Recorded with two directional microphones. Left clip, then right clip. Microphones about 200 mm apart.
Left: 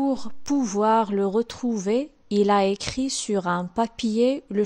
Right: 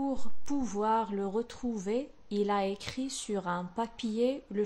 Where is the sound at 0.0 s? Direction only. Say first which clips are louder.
Left 9 dB; 40° left (ahead or behind).